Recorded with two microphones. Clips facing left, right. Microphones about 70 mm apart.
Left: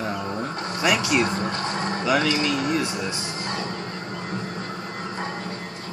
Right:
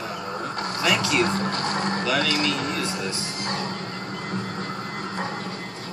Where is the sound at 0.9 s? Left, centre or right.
Centre.